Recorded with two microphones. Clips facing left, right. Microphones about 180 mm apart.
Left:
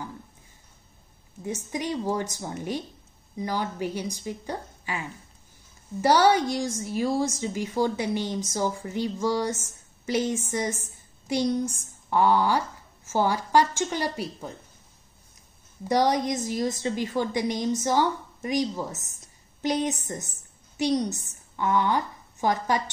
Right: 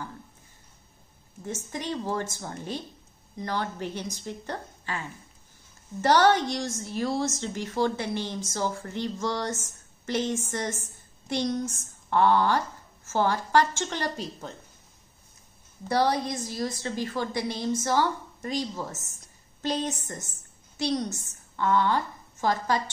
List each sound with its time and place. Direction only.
1.4 s a woman's voice: 15° left (ahead or behind)
15.9 s a woman's voice: 15° left (ahead or behind)